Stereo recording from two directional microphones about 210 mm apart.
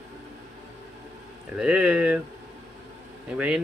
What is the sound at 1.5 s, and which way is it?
Speech, 5° right (ahead or behind).